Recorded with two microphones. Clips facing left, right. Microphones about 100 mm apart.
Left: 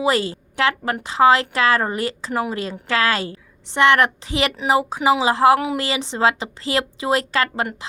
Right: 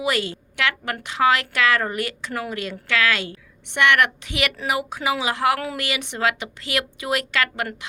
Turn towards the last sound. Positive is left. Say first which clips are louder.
# left 3 dB
turn(degrees=30)  # may be behind; listen again after turning